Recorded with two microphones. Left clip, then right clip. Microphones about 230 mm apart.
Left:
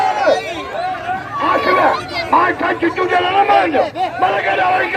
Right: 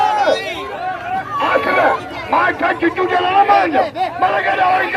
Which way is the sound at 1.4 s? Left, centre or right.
Right.